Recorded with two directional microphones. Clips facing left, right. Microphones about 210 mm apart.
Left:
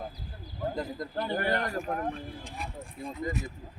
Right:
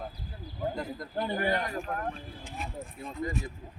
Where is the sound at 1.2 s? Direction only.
20° right (ahead or behind).